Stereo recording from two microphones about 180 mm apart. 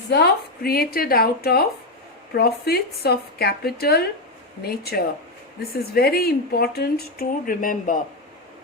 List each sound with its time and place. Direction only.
0.1 s speech: 60° left (ahead or behind)